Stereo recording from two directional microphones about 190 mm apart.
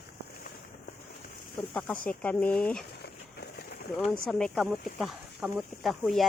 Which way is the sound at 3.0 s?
55° left (ahead or behind).